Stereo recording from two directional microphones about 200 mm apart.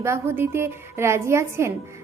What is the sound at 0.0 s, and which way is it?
A woman's voice, 15° right (ahead or behind).